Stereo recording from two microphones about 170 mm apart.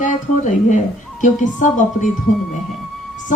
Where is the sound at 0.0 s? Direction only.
45° left (ahead or behind).